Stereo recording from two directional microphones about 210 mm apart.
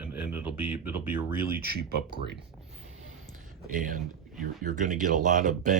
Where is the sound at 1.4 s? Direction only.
45° right (ahead or behind).